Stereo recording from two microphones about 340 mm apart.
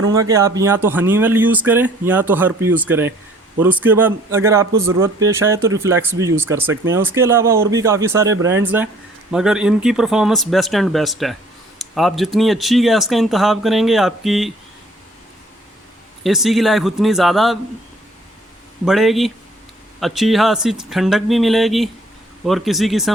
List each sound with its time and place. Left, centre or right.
0.1 s speech: centre
16.2 s speech: centre
18.9 s speech: centre